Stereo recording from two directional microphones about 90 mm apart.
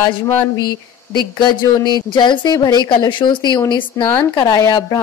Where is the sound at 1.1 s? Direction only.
55° left (ahead or behind).